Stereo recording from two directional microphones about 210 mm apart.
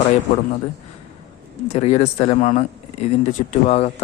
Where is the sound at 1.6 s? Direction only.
30° left (ahead or behind).